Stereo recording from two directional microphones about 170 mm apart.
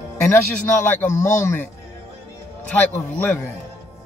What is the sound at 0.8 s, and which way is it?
Speech, 15° left (ahead or behind).